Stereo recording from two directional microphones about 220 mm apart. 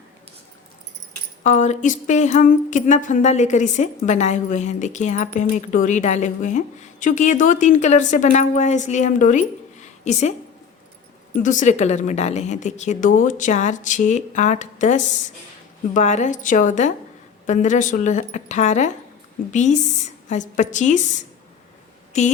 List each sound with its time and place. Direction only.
1.5 s speech: 35° left (ahead or behind)
11.3 s speech: 35° left (ahead or behind)